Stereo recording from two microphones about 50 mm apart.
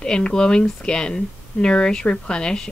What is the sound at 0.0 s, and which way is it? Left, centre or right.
A woman's voice, centre.